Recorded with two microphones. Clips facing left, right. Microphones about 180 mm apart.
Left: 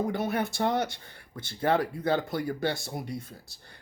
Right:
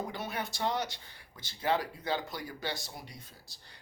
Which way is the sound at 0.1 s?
50° left (ahead or behind).